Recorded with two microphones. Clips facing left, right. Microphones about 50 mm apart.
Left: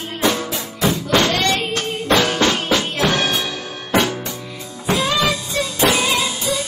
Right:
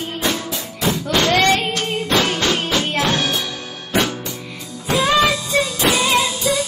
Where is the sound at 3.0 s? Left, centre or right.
Left.